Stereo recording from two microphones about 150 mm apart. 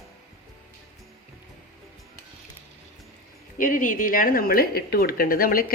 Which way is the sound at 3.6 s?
65° left (ahead or behind).